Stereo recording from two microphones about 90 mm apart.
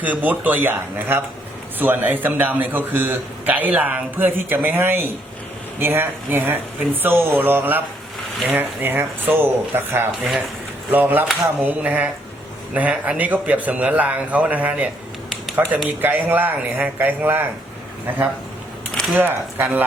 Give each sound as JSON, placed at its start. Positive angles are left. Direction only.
{"t": 0.0, "sound": "a man's voice", "side_deg": -20}
{"t": 19.1, "sound": "a man's voice", "side_deg": -25}